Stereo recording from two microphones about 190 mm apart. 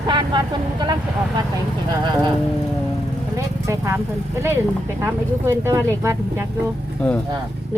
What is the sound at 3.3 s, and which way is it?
Speech, 15° right (ahead or behind).